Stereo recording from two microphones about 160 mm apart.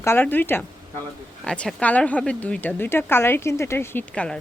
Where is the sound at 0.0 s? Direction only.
15° left (ahead or behind).